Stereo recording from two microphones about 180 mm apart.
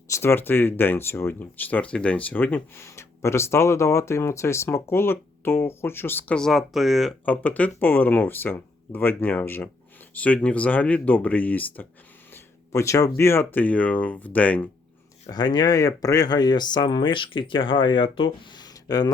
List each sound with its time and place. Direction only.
0.1 s speech: 15° left (ahead or behind)
15.3 s speech: 25° left (ahead or behind)